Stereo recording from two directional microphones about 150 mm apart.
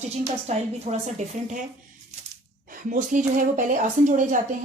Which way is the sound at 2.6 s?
65° right (ahead or behind).